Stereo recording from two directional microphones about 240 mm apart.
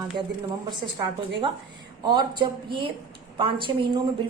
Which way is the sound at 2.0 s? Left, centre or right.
Centre.